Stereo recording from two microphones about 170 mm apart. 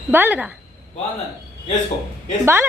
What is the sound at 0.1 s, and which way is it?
Speech, 10° right (ahead or behind).